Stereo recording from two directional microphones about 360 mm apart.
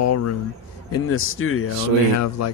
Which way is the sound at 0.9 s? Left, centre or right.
Left.